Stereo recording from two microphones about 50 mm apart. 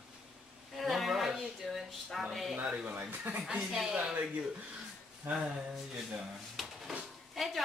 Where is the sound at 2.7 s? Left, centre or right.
Right.